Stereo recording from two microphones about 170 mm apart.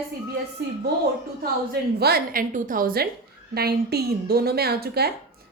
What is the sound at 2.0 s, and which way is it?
A woman's voice, 70° right (ahead or behind).